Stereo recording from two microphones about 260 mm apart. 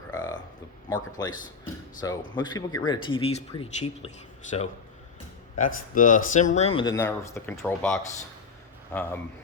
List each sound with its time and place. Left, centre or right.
0.1 s a sound: centre
1.2 s speech: centre
5.5 s speech: left; by 9.2 s centre